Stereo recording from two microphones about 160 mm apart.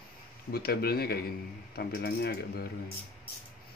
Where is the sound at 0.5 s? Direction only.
75° left (ahead or behind).